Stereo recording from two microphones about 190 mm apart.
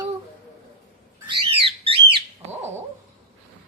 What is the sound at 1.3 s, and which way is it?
Bird, 30° right (ahead or behind).